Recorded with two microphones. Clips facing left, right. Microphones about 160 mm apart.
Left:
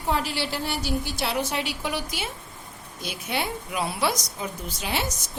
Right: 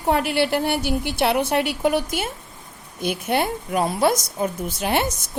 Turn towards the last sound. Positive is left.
turn(degrees=-55)  # may be behind; listen again after turning